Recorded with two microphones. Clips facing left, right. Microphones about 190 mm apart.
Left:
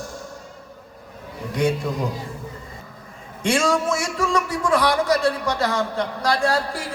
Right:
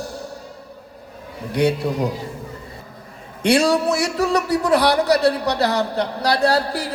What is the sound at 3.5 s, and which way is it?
A man's voice, 35° right (ahead or behind).